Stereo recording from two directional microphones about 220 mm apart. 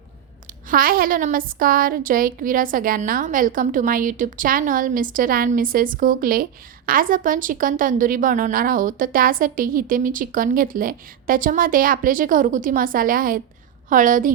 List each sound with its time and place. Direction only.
0.7 s a woman's voice: 40° right (ahead or behind)